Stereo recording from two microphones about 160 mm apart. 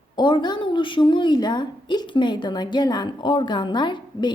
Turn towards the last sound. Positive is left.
turn(degrees=30)  # may be behind; listen again after turning